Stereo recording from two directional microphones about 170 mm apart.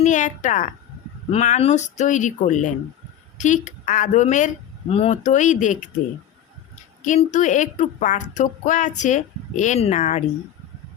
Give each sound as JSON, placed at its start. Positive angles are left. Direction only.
{"t": 0.0, "sound": "a woman's voice", "side_deg": 45}
{"t": 7.0, "sound": "a woman's voice", "side_deg": 45}